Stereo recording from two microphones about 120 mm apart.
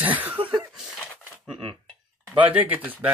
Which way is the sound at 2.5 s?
15° right (ahead or behind).